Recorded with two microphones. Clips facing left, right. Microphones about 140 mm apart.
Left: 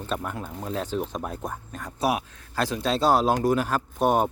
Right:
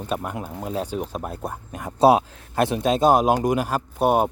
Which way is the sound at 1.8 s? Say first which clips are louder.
Right 10 dB; 25° right (ahead or behind).